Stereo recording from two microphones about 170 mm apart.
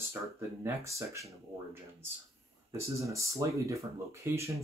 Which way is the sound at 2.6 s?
15° right (ahead or behind).